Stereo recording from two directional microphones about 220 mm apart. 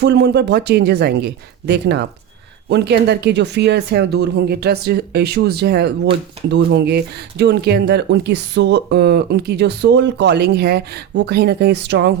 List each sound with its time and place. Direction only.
0.0 s speech: 50° right (ahead or behind)